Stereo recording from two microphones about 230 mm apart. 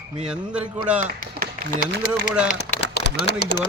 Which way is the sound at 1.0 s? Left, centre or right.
Right.